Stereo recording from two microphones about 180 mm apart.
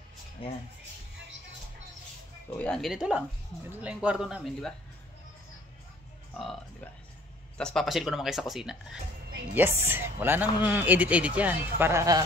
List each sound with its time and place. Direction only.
0.4 s speech: 30° left (ahead or behind)
2.6 s speech: centre (ahead or behind)
6.3 s speech: centre (ahead or behind); by 12.3 s 15° right (ahead or behind)